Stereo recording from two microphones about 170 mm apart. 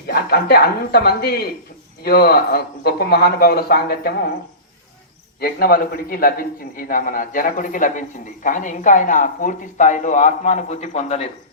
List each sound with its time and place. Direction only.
0.1 s speech: 65° left (ahead or behind)
5.4 s speech: 60° left (ahead or behind); by 11.3 s 40° left (ahead or behind)